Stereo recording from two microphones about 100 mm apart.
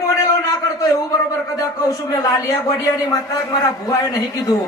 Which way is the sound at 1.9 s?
35° left (ahead or behind).